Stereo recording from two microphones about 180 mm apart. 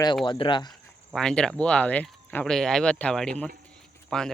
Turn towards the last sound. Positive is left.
turn(degrees=5)  # may be behind; listen again after turning